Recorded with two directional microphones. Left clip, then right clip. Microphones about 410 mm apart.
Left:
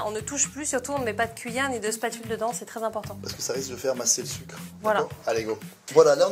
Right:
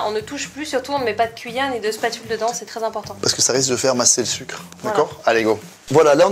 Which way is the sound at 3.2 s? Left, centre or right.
Right.